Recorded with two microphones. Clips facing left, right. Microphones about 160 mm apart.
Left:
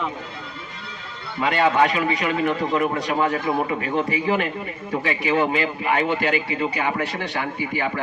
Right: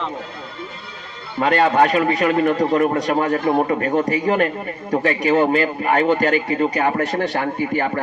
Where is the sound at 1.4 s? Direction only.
55° right (ahead or behind).